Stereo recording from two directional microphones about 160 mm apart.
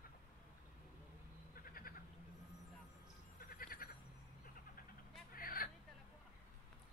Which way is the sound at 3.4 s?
65° left (ahead or behind).